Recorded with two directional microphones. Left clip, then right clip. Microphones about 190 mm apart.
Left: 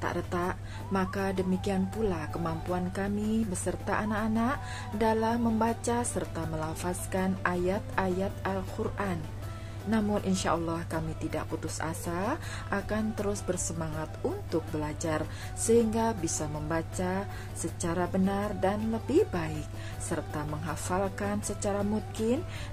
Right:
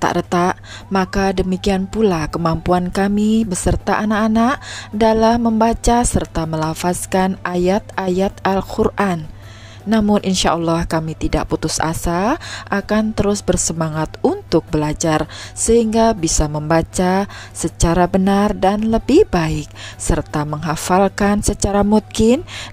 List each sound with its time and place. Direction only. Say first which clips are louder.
0.0 s speech: right 16 dB; 55° right (ahead or behind)